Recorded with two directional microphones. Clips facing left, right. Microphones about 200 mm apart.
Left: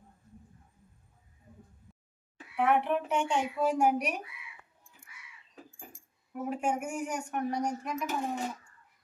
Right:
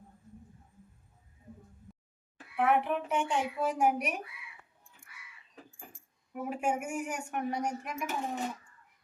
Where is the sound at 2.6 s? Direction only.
Centre (ahead or behind).